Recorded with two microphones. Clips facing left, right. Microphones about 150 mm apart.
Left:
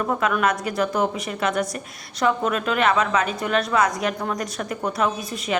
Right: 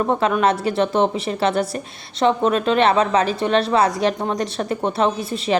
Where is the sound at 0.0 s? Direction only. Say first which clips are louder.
Right 4 dB; 30° right (ahead or behind).